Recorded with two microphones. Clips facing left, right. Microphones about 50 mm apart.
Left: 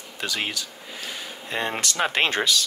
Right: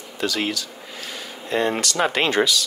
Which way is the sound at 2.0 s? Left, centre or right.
Centre.